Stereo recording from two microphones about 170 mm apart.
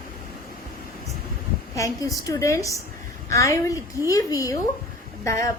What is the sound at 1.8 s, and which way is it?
A woman's voice, 20° left (ahead or behind).